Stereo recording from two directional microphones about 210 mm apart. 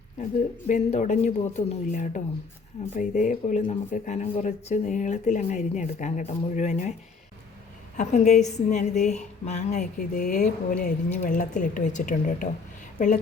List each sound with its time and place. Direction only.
0.7 s speech: 35° left (ahead or behind)
7.9 s speech: 35° left (ahead or behind)